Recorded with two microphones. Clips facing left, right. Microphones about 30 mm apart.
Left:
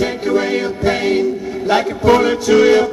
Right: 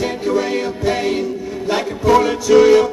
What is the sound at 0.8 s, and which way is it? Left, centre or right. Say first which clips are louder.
Music: left 4 dB; left.